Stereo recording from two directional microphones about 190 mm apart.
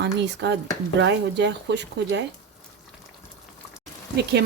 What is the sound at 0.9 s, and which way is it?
Speech, 65° right (ahead or behind).